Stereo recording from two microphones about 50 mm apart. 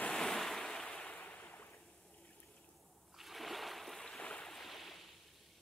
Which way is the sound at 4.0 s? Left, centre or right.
Centre.